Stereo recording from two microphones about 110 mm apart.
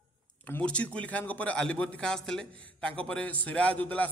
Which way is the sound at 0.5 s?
10° left (ahead or behind).